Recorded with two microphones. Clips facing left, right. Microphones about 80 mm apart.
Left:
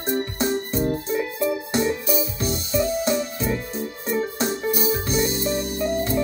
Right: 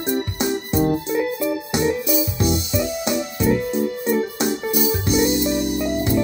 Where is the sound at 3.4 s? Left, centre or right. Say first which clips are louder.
Right 7 dB; right.